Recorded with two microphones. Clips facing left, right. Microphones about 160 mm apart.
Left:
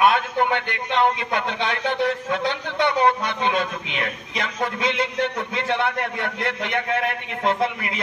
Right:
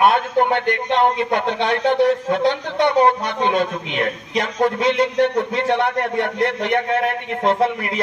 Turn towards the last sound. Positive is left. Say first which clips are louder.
# right 5 dB
turn(degrees=-45)  # may be behind; listen again after turning